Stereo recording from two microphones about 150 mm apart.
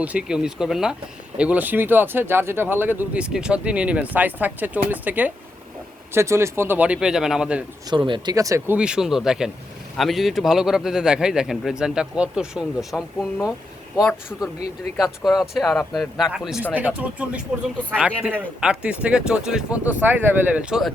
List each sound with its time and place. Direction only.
0.0 s a man's voice: 10° right (ahead or behind)
7.9 s a man's voice: 35° right (ahead or behind); by 13.0 s 5° right (ahead or behind)
15.2 s a man's voice: centre (ahead or behind)